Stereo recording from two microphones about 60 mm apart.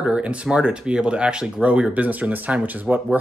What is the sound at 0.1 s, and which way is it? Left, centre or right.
A man's voice, centre.